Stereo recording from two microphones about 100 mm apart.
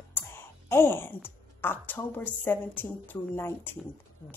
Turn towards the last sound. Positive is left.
turn(degrees=20)  # may be behind; listen again after turning